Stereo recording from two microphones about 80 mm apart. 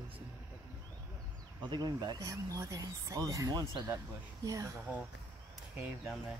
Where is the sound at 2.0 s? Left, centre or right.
Right.